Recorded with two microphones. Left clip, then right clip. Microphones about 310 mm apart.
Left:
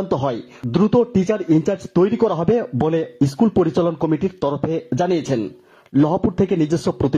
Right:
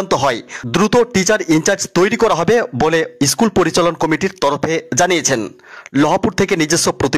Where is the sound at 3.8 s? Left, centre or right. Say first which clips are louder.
Right 5 dB; right.